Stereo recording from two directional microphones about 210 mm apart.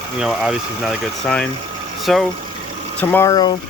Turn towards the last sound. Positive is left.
turn(degrees=20)  # may be behind; listen again after turning